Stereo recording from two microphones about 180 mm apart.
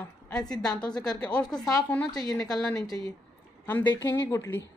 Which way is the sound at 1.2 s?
5° left (ahead or behind).